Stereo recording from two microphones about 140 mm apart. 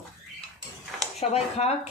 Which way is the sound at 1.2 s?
50° left (ahead or behind).